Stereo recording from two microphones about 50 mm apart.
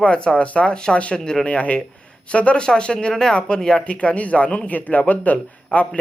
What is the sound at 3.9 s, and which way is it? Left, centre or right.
A man's voice, left.